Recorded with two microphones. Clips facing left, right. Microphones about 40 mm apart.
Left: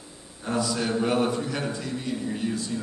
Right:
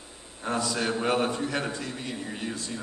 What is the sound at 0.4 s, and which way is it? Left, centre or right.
A man's voice, right.